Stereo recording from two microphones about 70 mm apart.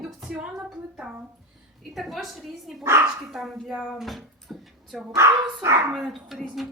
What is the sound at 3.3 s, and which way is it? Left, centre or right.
Speech, centre.